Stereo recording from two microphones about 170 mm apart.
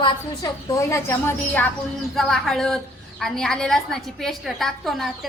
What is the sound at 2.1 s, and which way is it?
A woman's voice, centre (ahead or behind).